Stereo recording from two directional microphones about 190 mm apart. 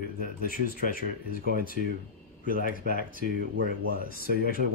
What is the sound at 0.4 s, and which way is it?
Speech, 50° left (ahead or behind).